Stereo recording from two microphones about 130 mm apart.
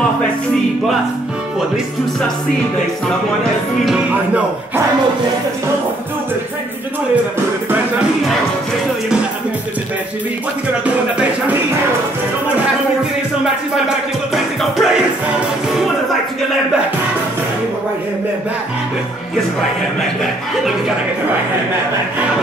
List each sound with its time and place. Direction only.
3.8 s music: 5° right (ahead or behind)
13.8 s music: centre (ahead or behind)